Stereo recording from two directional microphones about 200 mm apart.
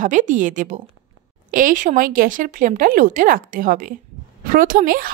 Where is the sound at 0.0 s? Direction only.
40° right (ahead or behind).